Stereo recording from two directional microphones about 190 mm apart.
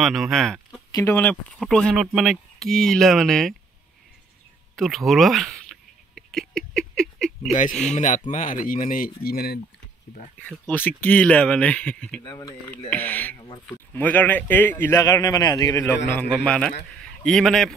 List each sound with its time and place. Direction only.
0.0 s speech: centre (ahead or behind)
0.9 s speech: 10° left (ahead or behind)
4.7 s speech: centre (ahead or behind)
6.1 s rodents: centre (ahead or behind)
7.9 s speech: 40° left (ahead or behind)
10.4 s a man's voice: 10° left (ahead or behind)
12.2 s speech: 20° left (ahead or behind)
12.9 s a man's voice: 10° left (ahead or behind)